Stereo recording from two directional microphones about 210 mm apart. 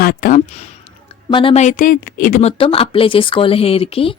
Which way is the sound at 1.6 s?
40° left (ahead or behind).